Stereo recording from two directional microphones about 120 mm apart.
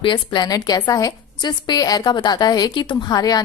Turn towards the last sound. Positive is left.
turn(degrees=35)  # may be behind; listen again after turning